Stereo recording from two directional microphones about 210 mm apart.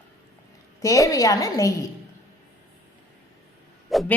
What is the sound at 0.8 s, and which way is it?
Speech, 15° left (ahead or behind).